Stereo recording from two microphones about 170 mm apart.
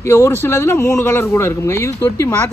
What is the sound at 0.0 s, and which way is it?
Speech, 15° left (ahead or behind).